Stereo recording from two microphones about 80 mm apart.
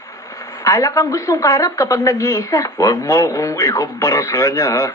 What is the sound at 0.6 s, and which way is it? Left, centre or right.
Speech, left.